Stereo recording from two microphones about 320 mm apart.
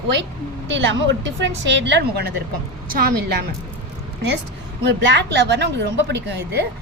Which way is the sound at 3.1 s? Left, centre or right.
Right.